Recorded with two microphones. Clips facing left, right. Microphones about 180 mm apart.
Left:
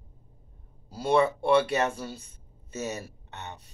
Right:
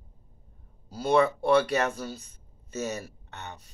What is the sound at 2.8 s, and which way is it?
Speech, 25° left (ahead or behind).